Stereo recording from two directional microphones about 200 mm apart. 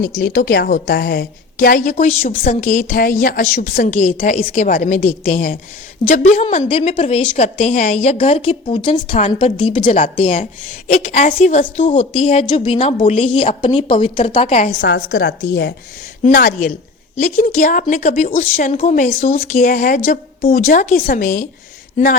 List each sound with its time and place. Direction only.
0.2 s a woman's voice: 50° left (ahead or behind); by 14.7 s 30° left (ahead or behind)
14.8 s a woman's voice: 55° left (ahead or behind)
16.2 s a woman's voice: 45° left (ahead or behind)